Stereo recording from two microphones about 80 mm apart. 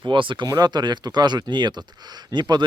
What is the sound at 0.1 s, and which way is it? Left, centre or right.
Speech, right.